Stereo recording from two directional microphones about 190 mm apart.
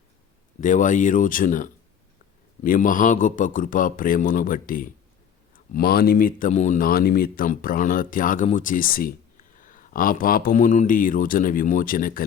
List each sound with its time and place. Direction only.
0.6 s speech: 40° left (ahead or behind)